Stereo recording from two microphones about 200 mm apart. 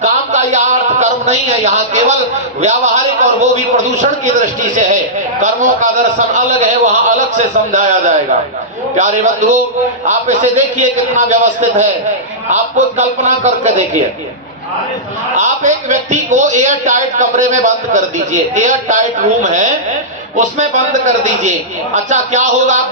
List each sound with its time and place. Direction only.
0.0 s a sound: 35° right (ahead or behind)
2.6 s a man's voice: 35° right (ahead or behind)
15.4 s a man's voice: 35° right (ahead or behind)